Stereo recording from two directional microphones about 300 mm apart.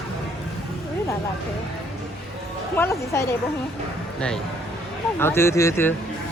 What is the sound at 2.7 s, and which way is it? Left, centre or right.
Speech, centre.